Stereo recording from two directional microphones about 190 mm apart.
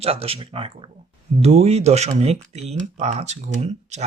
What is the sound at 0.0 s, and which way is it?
Speech, 30° right (ahead or behind).